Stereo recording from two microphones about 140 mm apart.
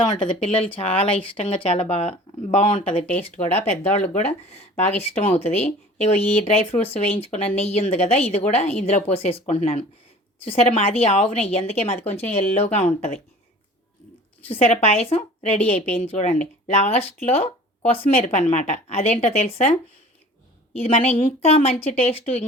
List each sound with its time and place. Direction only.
0.1 s speech: 55° left (ahead or behind)
0.7 s speech: 45° left (ahead or behind)
14.4 s speech: 45° left (ahead or behind)
20.7 s speech: 50° left (ahead or behind)